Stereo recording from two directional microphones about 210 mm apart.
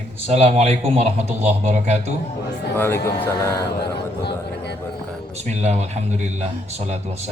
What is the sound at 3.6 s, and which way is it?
Speech, 50° left (ahead or behind).